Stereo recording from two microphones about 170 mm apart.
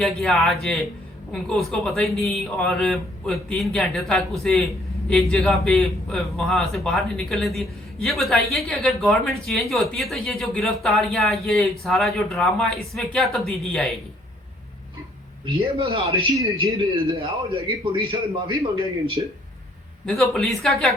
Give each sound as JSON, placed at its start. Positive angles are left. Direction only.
{"t": 0.2, "sound": "speech", "side_deg": 0}
{"t": 15.5, "sound": "a man's voice", "side_deg": -35}
{"t": 20.1, "sound": "speech", "side_deg": 0}